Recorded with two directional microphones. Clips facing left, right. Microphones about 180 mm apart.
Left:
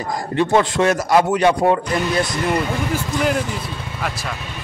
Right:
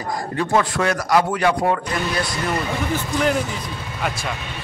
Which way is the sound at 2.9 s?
10° left (ahead or behind).